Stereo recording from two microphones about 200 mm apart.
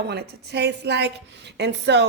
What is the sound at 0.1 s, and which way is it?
A woman's voice, 55° right (ahead or behind).